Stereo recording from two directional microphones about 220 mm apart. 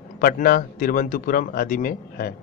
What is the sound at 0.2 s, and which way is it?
A man's voice, 40° left (ahead or behind).